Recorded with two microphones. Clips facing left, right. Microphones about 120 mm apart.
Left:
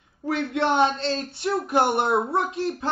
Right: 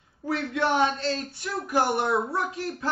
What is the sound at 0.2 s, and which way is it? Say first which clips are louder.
A man's voice: left 2 dB; 25° left (ahead or behind).